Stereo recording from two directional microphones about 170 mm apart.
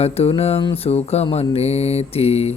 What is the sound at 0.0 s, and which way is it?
Speech, 35° left (ahead or behind).